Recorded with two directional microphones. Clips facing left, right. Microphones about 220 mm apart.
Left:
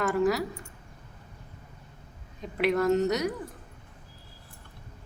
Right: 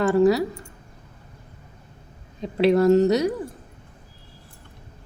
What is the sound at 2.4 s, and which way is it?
Speech, 30° right (ahead or behind).